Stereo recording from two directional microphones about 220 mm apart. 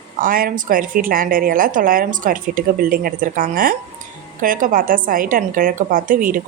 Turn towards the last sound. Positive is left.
turn(degrees=-35)  # may be behind; listen again after turning